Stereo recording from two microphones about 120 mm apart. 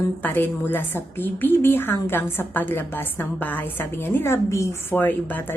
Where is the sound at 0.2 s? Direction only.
15° left (ahead or behind).